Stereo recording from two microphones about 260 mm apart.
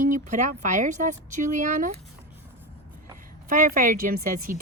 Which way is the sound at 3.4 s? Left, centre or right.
Right.